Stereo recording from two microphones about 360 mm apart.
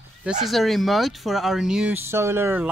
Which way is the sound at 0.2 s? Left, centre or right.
Centre.